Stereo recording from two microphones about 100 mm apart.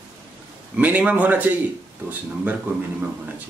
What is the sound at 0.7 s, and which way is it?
Speech, 15° right (ahead or behind).